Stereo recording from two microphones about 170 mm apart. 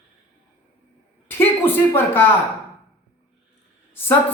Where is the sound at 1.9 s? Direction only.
10° left (ahead or behind).